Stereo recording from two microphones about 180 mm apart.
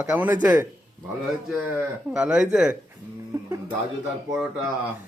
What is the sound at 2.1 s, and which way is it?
Speech, 5° right (ahead or behind).